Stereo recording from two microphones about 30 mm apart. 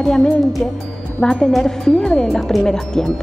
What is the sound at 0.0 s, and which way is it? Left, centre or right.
A woman's voice, left.